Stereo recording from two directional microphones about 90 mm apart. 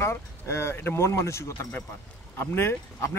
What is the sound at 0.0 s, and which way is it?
Speech, 30° left (ahead or behind).